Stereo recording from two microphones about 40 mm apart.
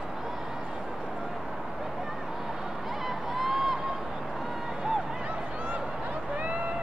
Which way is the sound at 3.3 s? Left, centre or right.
Centre.